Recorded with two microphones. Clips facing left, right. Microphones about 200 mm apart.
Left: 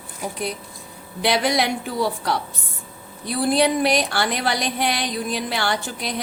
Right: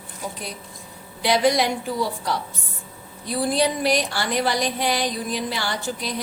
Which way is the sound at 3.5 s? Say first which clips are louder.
Left 3 dB; 65° left (ahead or behind).